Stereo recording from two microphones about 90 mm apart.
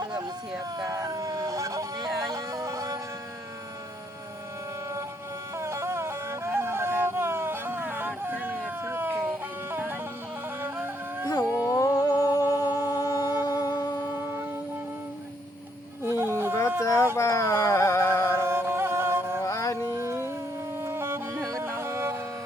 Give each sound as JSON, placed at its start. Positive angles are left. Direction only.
{"t": 0.9, "sound": "vehicle", "side_deg": -40}
{"t": 2.3, "sound": "music", "side_deg": -35}
{"t": 5.5, "sound": "music", "side_deg": -30}
{"t": 11.4, "sound": "a sound", "side_deg": -15}
{"t": 11.7, "sound": "music", "side_deg": 40}
{"t": 16.0, "sound": "a sound", "side_deg": -30}
{"t": 16.8, "sound": "a sound", "side_deg": 35}
{"t": 18.3, "sound": "music", "side_deg": -25}
{"t": 19.4, "sound": "music", "side_deg": 35}
{"t": 19.9, "sound": "howl", "side_deg": -30}
{"t": 20.7, "sound": "music", "side_deg": -25}